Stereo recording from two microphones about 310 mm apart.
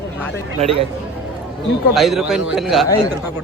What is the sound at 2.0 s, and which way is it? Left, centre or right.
A man's voice, centre.